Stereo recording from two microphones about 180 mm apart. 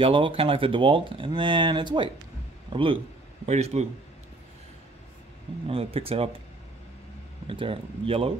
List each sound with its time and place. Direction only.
0.0 s speech: 30° right (ahead or behind)
5.7 s speech: 30° right (ahead or behind)
7.4 s speech: 30° right (ahead or behind)